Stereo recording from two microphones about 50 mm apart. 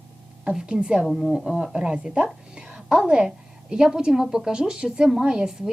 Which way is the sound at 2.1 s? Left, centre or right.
Centre.